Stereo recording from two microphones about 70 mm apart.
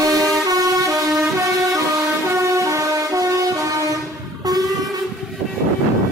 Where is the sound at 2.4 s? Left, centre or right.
Right.